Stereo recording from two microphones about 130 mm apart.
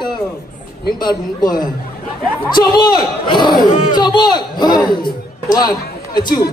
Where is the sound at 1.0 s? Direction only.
30° left (ahead or behind).